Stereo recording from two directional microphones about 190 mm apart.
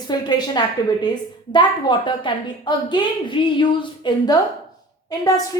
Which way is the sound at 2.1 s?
25° left (ahead or behind).